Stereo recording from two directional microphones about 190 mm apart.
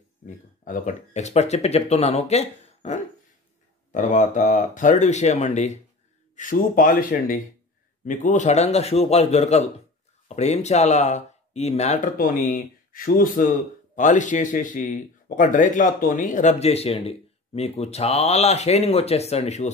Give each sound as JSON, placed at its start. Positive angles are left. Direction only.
{"t": 0.7, "sound": "speech", "side_deg": 45}